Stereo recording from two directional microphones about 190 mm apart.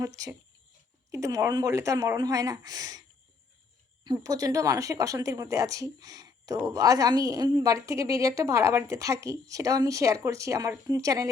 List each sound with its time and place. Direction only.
1.1 s speech: 15° right (ahead or behind)
4.0 s speech: 20° right (ahead or behind)